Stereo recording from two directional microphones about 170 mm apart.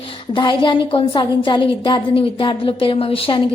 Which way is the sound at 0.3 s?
25° left (ahead or behind).